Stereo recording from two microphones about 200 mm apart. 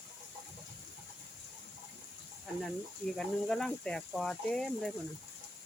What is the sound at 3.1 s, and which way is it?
Speech, 5° left (ahead or behind).